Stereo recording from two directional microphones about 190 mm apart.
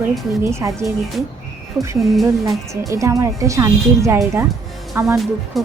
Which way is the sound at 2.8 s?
15° right (ahead or behind).